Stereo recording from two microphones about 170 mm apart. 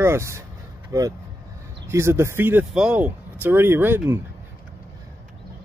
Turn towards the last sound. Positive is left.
turn(degrees=-15)  # may be behind; listen again after turning